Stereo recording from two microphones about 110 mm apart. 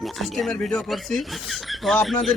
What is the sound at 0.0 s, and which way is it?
Speech, centre (ahead or behind).